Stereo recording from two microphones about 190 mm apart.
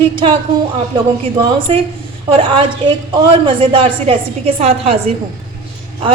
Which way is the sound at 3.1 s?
25° right (ahead or behind).